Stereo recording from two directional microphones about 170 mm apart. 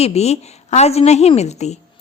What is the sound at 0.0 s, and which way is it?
A woman's voice, 40° left (ahead or behind).